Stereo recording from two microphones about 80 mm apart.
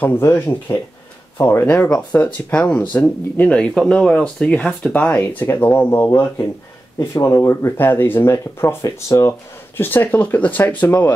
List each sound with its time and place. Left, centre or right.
0.2 s speech: left
9.8 s speech: left